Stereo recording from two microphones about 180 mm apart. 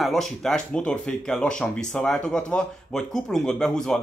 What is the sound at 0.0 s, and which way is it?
Speech, centre (ahead or behind).